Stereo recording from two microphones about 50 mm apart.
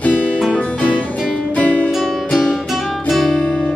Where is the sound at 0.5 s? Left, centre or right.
Left.